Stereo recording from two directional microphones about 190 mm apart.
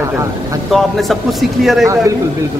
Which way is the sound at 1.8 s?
15° right (ahead or behind).